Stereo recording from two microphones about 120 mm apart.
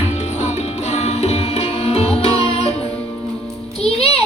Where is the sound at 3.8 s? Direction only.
60° left (ahead or behind).